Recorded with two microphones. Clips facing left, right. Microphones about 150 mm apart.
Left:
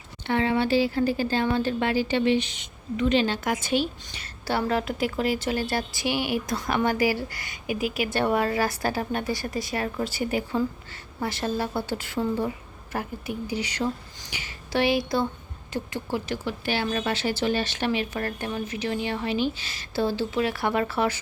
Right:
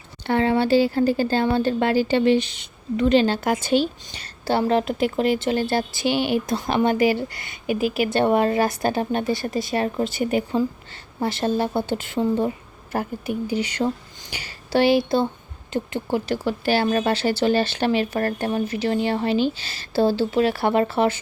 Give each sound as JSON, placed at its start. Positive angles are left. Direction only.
{"t": 0.3, "sound": "speech", "side_deg": -40}